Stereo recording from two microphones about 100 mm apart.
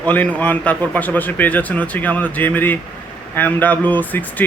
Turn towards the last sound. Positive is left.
turn(degrees=15)  # may be behind; listen again after turning